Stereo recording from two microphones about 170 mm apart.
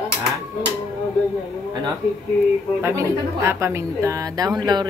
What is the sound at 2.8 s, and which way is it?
A woman's voice, 15° right (ahead or behind).